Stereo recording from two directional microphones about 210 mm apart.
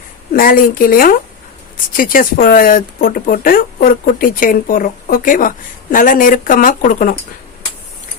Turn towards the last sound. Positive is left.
turn(degrees=40)  # may be behind; listen again after turning